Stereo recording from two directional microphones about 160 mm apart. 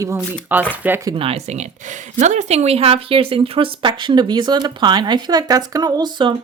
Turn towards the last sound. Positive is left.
turn(degrees=-30)  # may be behind; listen again after turning